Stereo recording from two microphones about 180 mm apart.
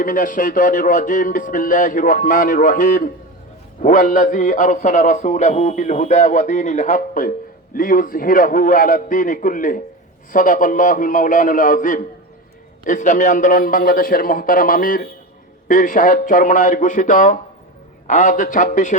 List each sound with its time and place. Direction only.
0.0 s a man's voice: 50° left (ahead or behind)